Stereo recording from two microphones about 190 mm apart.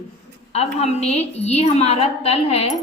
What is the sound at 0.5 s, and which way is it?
A woman's voice, 35° left (ahead or behind).